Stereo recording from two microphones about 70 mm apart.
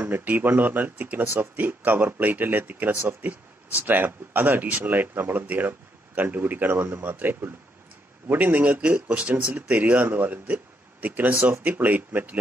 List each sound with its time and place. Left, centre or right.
0.0 s speech: right